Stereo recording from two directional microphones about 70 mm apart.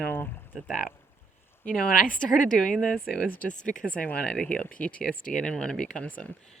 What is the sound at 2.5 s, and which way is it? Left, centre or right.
Speech, centre.